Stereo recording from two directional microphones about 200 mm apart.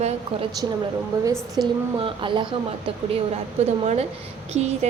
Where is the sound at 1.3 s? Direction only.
Centre (ahead or behind).